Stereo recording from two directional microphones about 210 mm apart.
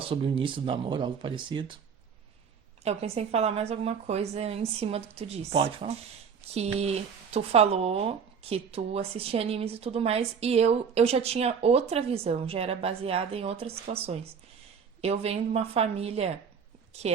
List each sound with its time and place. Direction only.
0.1 s speech: 25° right (ahead or behind)
2.8 s speech: 30° right (ahead or behind)